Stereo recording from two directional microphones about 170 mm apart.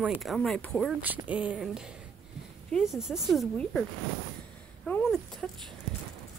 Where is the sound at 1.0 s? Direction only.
10° right (ahead or behind).